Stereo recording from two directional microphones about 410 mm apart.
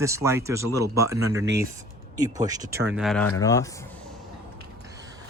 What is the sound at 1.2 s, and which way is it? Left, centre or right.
Speech, right.